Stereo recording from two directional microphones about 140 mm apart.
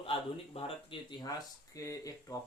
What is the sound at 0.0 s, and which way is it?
Speech, 40° left (ahead or behind).